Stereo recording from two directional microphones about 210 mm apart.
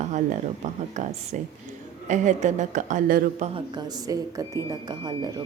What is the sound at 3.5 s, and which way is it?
Speech, 20° right (ahead or behind).